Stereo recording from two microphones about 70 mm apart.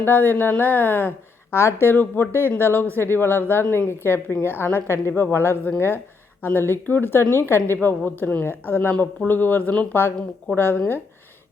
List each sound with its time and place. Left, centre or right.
0.0 s a woman's voice: left